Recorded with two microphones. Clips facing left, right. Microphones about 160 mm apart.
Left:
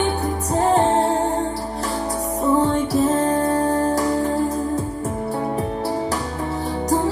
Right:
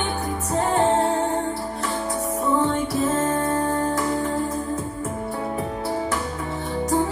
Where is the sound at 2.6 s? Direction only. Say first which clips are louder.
Left 4 dB; 35° left (ahead or behind).